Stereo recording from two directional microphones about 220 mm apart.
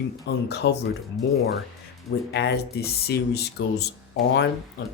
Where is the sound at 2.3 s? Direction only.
50° left (ahead or behind).